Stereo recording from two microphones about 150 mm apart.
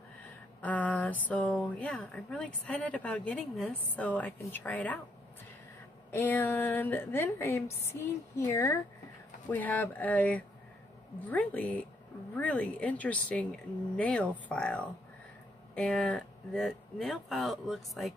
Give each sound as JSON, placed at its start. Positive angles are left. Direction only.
{"t": 0.6, "sound": "speech", "side_deg": 10}
{"t": 6.1, "sound": "speech", "side_deg": 10}